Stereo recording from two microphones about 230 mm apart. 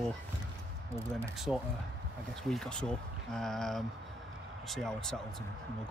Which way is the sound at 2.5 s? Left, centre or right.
Centre.